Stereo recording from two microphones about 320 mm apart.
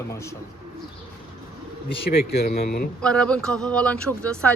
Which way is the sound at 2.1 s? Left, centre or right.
Left.